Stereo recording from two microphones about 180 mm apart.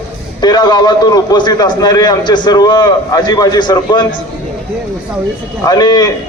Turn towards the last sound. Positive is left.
turn(degrees=25)  # may be behind; listen again after turning